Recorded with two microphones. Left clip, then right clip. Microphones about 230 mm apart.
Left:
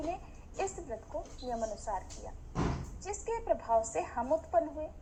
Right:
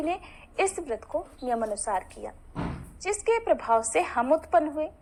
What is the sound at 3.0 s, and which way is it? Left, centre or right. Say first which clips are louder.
A woman's voice: right 10 dB; right.